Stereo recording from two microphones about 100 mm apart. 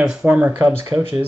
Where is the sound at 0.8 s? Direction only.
25° right (ahead or behind).